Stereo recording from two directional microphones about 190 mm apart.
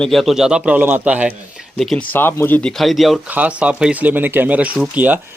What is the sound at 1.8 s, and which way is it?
Speech, 5° left (ahead or behind).